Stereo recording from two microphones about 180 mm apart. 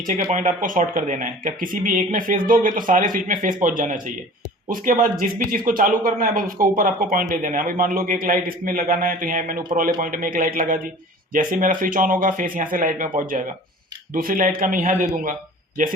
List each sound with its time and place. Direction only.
0.1 s speech: 45° right (ahead or behind)
5.3 s speech: 50° right (ahead or behind)
14.1 s speech: 50° right (ahead or behind)